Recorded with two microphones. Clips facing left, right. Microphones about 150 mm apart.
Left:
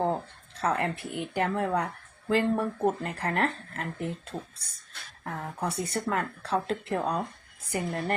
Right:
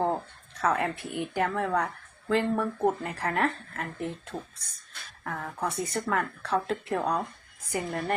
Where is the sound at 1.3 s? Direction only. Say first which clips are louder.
Even; 15° left (ahead or behind).